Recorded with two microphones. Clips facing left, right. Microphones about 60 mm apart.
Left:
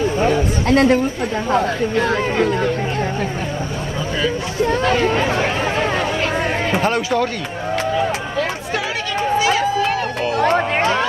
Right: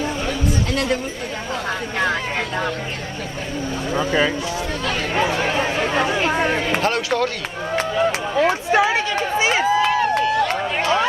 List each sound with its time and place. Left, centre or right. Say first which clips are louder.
0.2 s chatter: left 5 dB; left
4.6 s speech: left 7 dB; left
6.8 s speech: left 2 dB; centre
8.4 s speech: right 9 dB; right
10.4 s music: left 4 dB; left